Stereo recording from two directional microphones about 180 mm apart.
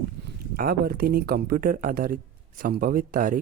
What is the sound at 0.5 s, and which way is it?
Speech, 55° right (ahead or behind).